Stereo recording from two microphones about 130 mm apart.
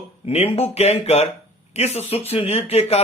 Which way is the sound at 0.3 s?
50° left (ahead or behind).